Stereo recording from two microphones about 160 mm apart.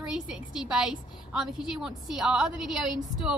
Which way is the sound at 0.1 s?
5° right (ahead or behind).